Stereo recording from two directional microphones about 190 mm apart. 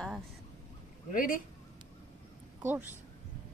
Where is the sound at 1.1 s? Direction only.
45° left (ahead or behind).